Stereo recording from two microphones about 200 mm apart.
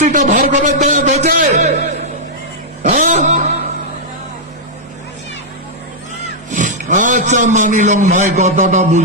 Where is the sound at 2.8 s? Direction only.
35° right (ahead or behind).